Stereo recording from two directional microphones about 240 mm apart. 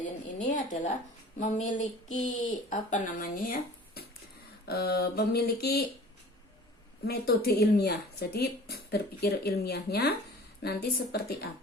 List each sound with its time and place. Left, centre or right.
0.3 s speech: left
7.0 s speech: left